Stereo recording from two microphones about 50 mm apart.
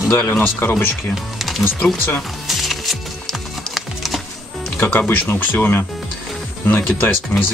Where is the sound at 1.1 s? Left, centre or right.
Centre.